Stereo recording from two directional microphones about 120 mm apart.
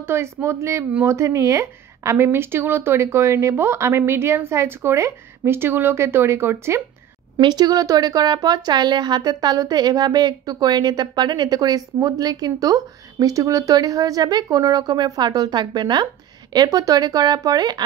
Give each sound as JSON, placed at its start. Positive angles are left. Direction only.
{"t": 0.0, "sound": "a woman's voice", "side_deg": -20}
{"t": 7.3, "sound": "speech", "side_deg": -35}